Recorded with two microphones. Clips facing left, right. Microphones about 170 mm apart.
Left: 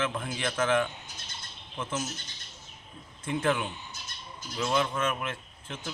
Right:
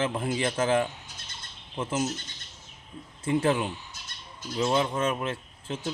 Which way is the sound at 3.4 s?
30° right (ahead or behind).